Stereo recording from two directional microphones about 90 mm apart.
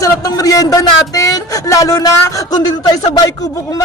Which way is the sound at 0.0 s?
45° left (ahead or behind).